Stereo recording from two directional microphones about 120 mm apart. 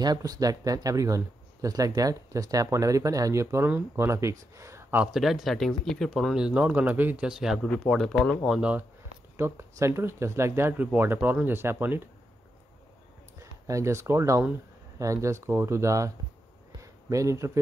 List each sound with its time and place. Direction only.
0.0 s speech: 30° right (ahead or behind)
5.0 s speech: 5° right (ahead or behind)
7.2 s speech: 5° right (ahead or behind)
8.5 s speech: 10° right (ahead or behind)
9.4 s speech: 20° right (ahead or behind)
13.4 s speech: 25° right (ahead or behind)
17.1 s speech: 25° right (ahead or behind)